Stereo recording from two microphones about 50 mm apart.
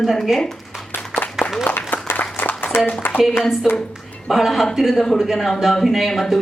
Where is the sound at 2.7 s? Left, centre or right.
Left.